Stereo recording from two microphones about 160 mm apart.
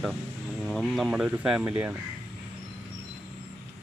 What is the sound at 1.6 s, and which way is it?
Speech, 15° right (ahead or behind).